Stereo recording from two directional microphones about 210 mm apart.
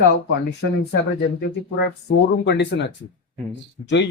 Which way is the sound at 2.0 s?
60° left (ahead or behind).